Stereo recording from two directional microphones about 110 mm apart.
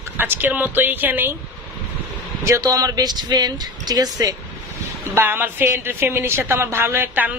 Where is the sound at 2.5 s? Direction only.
30° right (ahead or behind).